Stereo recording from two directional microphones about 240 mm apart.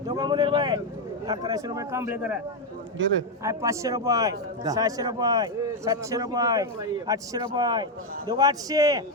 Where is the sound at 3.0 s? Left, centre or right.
Right.